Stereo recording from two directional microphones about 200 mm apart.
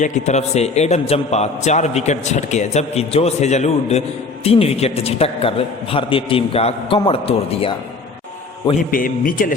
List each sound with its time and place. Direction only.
0.0 s a man's voice: 35° left (ahead or behind)
8.7 s speech: 45° left (ahead or behind)